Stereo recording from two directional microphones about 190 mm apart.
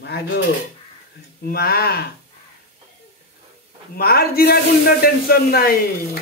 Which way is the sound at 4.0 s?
55° left (ahead or behind).